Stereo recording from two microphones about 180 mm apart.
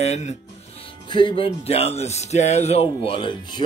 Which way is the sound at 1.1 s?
30° left (ahead or behind).